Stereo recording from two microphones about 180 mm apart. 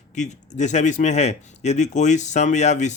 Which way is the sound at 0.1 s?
40° left (ahead or behind).